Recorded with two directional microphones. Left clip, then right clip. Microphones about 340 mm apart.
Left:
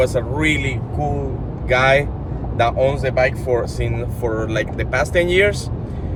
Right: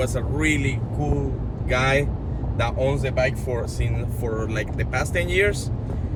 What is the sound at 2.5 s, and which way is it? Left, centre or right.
Speech, centre.